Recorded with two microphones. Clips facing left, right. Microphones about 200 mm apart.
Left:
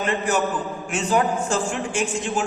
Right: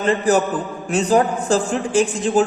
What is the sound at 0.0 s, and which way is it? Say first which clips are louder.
A man's voice: right 6 dB; 35° right (ahead or behind).